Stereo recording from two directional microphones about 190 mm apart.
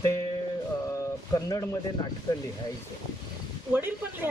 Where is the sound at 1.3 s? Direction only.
20° left (ahead or behind).